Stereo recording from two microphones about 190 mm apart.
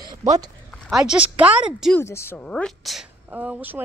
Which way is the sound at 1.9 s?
15° left (ahead or behind).